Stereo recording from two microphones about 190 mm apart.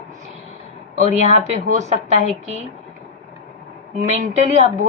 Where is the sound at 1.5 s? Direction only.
40° right (ahead or behind).